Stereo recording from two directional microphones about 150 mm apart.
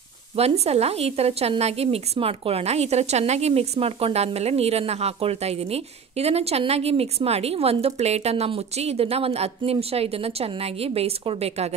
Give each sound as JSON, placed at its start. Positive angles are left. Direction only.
{"t": 0.4, "sound": "a woman's voice", "side_deg": -45}